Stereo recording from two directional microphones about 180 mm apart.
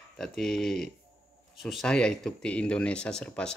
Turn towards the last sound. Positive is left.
turn(degrees=5)  # may be behind; listen again after turning